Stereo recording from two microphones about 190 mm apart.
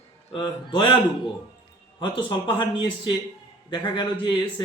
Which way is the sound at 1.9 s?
25° left (ahead or behind).